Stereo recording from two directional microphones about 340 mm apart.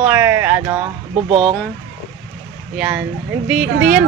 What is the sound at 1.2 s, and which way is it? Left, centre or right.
Speech, centre.